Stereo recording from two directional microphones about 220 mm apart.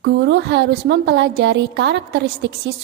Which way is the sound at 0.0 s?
50° right (ahead or behind).